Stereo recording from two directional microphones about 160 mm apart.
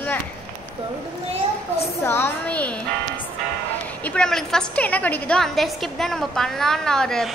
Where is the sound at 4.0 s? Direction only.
5° left (ahead or behind).